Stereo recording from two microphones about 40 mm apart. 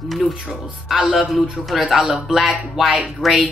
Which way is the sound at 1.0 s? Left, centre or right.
Centre.